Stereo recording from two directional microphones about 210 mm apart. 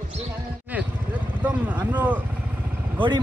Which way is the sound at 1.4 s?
10° right (ahead or behind).